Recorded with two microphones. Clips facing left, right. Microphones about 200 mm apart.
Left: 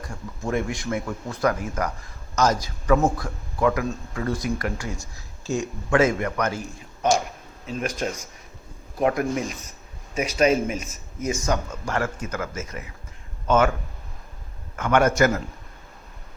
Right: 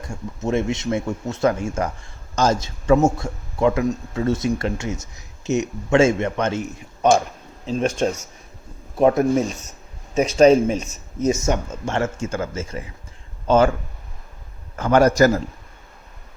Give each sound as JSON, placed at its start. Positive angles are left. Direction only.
{"t": 0.0, "sound": "a man's voice", "side_deg": -25}
{"t": 14.8, "sound": "a man's voice", "side_deg": -35}